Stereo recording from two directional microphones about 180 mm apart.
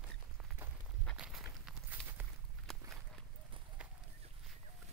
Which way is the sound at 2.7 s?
Centre (ahead or behind).